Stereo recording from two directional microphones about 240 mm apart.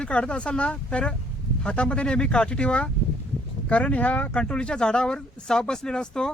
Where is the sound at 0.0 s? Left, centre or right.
Centre.